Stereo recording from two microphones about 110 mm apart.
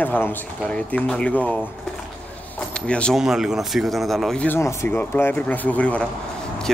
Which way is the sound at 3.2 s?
5° right (ahead or behind).